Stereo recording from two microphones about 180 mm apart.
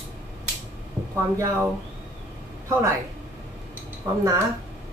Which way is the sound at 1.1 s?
15° right (ahead or behind).